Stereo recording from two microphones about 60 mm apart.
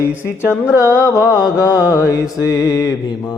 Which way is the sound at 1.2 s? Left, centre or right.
Left.